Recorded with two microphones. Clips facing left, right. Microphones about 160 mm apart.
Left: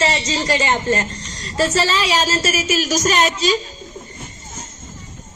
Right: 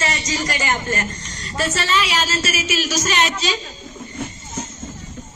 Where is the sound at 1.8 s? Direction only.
35° left (ahead or behind).